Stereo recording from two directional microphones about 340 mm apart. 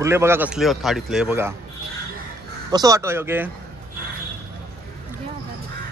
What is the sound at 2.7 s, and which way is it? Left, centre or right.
Speech, centre.